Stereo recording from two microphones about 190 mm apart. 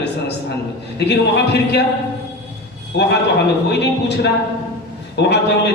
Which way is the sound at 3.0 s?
65° left (ahead or behind).